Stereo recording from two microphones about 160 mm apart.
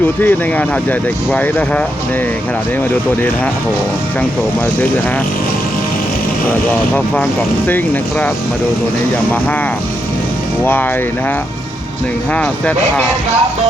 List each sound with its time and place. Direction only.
0.2 s speech: 10° left (ahead or behind)
12.3 s speech: 10° left (ahead or behind)